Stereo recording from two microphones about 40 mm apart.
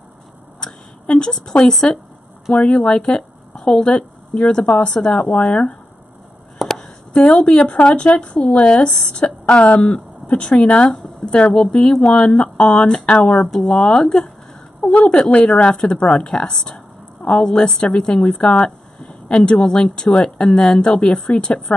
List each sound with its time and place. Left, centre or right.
1.0 s speech: left
2.5 s a woman's voice: left
5.1 s speech: left
6.6 s a sound: centre
7.3 s a woman's voice: left
18.9 s a sound: centre
19.3 s speech: left